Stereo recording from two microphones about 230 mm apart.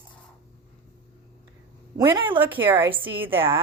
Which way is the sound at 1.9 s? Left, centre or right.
Centre.